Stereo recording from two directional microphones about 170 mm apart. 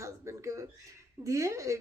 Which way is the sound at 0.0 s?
15° right (ahead or behind).